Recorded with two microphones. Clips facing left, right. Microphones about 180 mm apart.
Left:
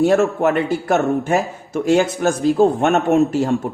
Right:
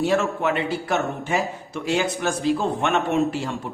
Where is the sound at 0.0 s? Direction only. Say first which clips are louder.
Left 7 dB; 45° left (ahead or behind).